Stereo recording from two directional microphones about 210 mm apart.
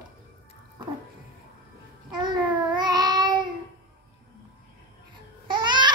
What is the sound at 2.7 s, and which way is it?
Child singing, 20° right (ahead or behind).